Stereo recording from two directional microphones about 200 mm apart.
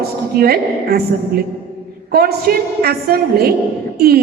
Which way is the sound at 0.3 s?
50° right (ahead or behind).